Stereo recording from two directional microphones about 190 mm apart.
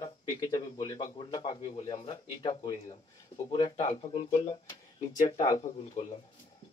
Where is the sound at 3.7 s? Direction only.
35° left (ahead or behind).